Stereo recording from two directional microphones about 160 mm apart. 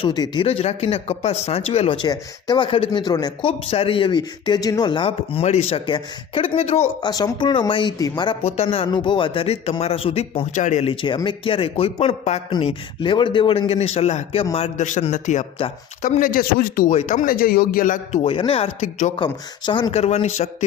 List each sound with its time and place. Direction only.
0.0 s speech: 25° left (ahead or behind)
0.4 s speech: 40° left (ahead or behind)
7.0 s speech: 25° left (ahead or behind); by 10.9 s 45° left (ahead or behind)
11.0 s speech: 30° left (ahead or behind)
12.5 s speech: 30° left (ahead or behind)
14.8 s speech: 50° left (ahead or behind)
16.0 s speech: 55° left (ahead or behind); by 18.9 s 35° left (ahead or behind)
18.9 s speech: 50° left (ahead or behind)
19.2 s speech: 30° left (ahead or behind)
19.9 s speech: 40° left (ahead or behind)